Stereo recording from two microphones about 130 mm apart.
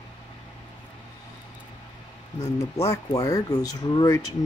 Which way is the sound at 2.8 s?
25° left (ahead or behind).